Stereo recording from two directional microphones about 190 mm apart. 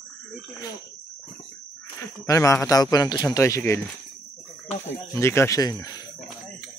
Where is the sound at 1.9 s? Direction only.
15° left (ahead or behind).